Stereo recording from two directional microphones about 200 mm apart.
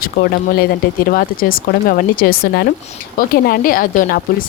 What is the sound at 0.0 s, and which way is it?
A woman's voice, 50° left (ahead or behind).